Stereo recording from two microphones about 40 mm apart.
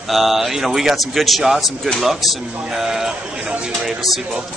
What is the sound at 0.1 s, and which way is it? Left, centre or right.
A man's voice, centre.